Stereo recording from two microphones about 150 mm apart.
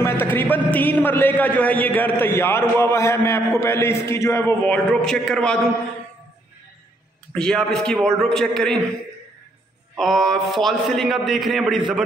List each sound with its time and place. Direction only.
0.0 s a man's voice: 15° left (ahead or behind)
5.0 s a man's voice: 5° left (ahead or behind)
7.3 s a man's voice: 5° left (ahead or behind)
9.9 s a man's voice: centre (ahead or behind)